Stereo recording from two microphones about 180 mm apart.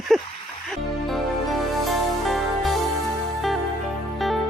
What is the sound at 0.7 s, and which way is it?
Music, centre (ahead or behind).